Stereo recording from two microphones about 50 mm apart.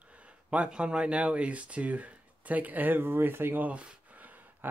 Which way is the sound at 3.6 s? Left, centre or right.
Right.